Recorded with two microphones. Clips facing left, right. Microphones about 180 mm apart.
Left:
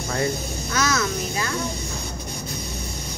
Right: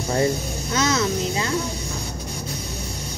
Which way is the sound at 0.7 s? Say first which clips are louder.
Right 2 dB; 25° right (ahead or behind).